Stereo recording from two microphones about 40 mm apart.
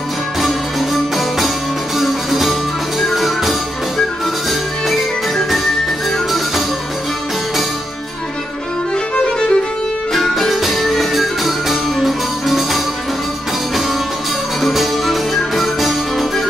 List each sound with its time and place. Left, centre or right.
0.4 s music: centre
9.1 s music: left
10.1 s music: centre
14.6 s music: centre